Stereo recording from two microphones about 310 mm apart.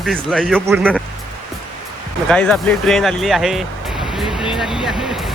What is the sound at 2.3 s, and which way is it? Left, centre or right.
Speech, centre.